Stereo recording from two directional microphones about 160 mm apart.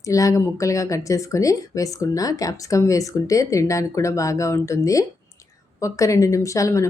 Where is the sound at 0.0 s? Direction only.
20° left (ahead or behind).